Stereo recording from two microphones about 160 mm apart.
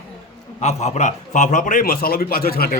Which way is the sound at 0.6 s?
45° left (ahead or behind).